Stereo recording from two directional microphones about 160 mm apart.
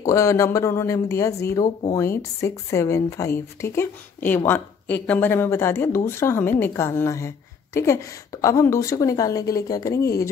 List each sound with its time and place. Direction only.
0.0 s a woman's voice: 20° left (ahead or behind)